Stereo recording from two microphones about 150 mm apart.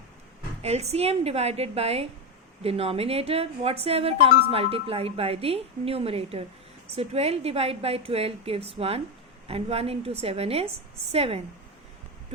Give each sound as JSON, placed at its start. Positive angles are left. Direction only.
{"t": 0.6, "sound": "a woman's voice", "side_deg": -45}